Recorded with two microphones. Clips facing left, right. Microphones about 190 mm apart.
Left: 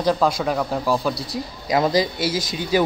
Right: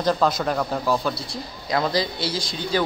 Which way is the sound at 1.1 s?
40° left (ahead or behind).